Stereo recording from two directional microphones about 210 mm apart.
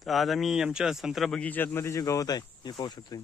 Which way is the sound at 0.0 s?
Centre (ahead or behind).